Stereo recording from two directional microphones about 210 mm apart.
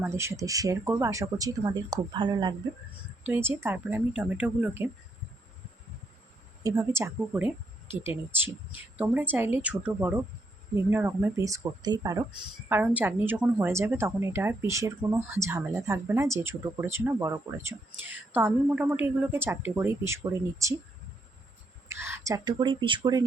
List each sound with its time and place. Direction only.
0.0 s speech: 15° right (ahead or behind)
3.2 s speech: 10° right (ahead or behind)
6.6 s speech: 15° right (ahead or behind)
21.8 s speech: 10° right (ahead or behind)